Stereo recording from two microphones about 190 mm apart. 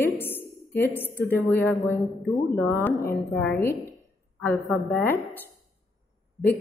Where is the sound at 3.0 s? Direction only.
55° left (ahead or behind).